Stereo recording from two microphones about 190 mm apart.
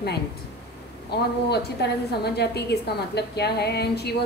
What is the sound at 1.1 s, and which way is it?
A woman's voice, 60° left (ahead or behind).